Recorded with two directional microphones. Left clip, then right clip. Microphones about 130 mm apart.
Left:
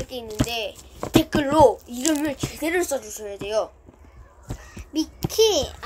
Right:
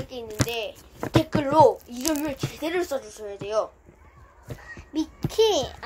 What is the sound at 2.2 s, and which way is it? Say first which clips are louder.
A child's voice: left 3 dB; 25° left (ahead or behind).